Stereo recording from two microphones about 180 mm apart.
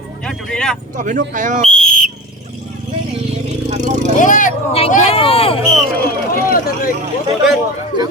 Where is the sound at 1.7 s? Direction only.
5° left (ahead or behind).